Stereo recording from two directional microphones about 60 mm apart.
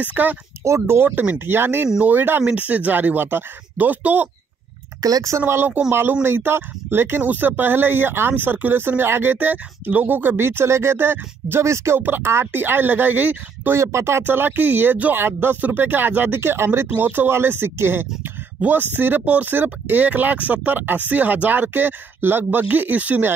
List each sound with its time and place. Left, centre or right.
0.0 s speech: right
0.7 s speech: right
5.0 s speech: right
5.5 s speech: right
11.6 s speech: right
12.0 s speech: right
13.7 s speech: right
16.9 s speech: right